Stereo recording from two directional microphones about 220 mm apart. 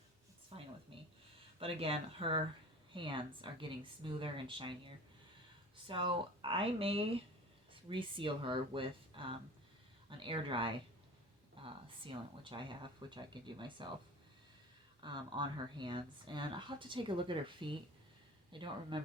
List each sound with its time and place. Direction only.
0.5 s a sound: 25° right (ahead or behind)
0.9 s speech: 25° right (ahead or behind)
5.9 s speech: 25° right (ahead or behind)
15.0 s speech: 20° right (ahead or behind)